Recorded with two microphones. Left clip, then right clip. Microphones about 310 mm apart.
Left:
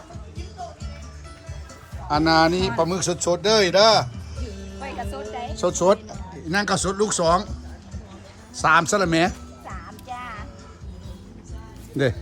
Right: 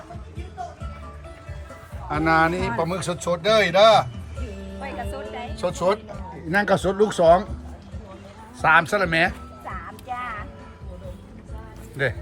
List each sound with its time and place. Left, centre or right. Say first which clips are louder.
2.0 s speech: left 2 dB; centre
4.8 s music: even; centre
5.5 s speech: left 3 dB; centre
8.6 s speech: even; centre
9.6 s music: right 3 dB; centre